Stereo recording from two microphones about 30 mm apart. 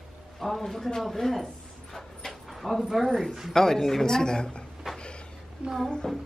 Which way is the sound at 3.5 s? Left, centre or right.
Centre.